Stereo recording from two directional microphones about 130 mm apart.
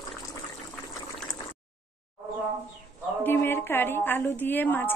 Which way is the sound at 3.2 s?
15° left (ahead or behind).